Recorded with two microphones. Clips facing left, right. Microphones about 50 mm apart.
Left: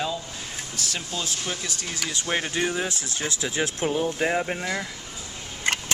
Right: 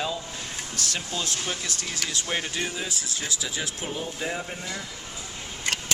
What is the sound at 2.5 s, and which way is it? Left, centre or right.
Speech, left.